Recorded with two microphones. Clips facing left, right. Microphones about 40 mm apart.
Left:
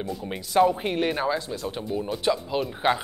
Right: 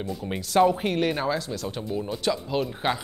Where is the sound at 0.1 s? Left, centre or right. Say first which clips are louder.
Right 1 dB; centre.